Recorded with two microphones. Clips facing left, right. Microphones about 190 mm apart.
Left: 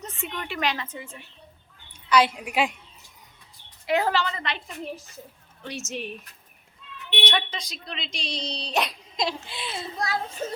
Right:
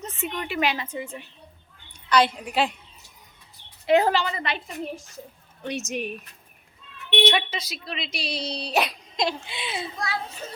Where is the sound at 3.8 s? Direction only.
20° right (ahead or behind); by 5.0 s centre (ahead or behind).